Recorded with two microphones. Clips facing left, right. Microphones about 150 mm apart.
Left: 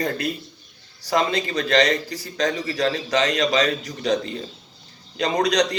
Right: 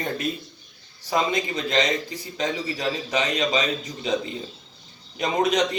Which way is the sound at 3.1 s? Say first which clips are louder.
Left 3 dB; 90° left.